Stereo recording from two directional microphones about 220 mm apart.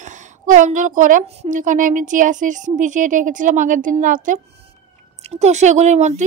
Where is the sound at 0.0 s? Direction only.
35° right (ahead or behind).